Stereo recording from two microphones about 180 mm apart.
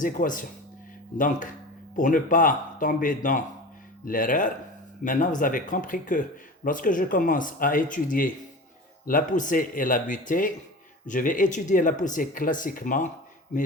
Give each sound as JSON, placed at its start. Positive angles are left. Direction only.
{"t": 0.0, "sound": "speech", "side_deg": 45}